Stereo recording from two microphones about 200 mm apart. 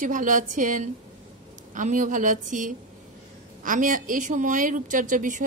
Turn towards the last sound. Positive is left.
turn(degrees=-40)  # may be behind; listen again after turning